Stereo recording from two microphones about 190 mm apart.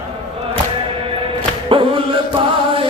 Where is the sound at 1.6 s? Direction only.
25° right (ahead or behind).